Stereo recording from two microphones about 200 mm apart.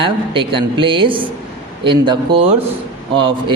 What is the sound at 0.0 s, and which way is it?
Speech, 25° right (ahead or behind).